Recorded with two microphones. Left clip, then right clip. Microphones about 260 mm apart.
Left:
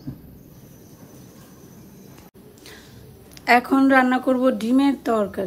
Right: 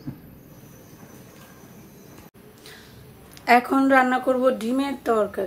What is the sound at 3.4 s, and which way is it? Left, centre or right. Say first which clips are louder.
A woman's voice: left 1 dB; left.